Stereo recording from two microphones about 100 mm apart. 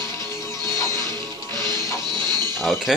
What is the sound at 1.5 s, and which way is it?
Music, 40° right (ahead or behind).